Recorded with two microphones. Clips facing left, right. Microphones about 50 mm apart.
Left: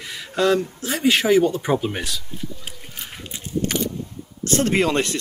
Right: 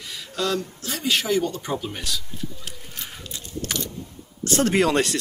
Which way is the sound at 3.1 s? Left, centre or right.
Left.